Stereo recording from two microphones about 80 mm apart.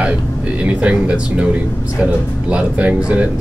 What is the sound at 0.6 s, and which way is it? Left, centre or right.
Speech, centre.